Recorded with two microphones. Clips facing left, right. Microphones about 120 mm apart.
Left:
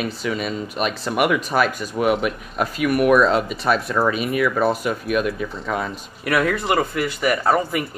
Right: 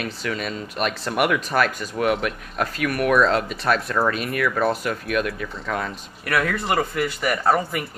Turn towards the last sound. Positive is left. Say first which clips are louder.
# left 2 dB
turn(degrees=5)  # may be behind; listen again after turning